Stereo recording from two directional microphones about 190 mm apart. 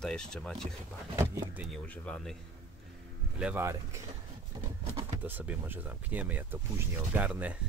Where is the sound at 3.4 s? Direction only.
10° right (ahead or behind).